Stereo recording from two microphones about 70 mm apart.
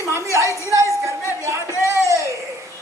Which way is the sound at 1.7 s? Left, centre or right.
Left.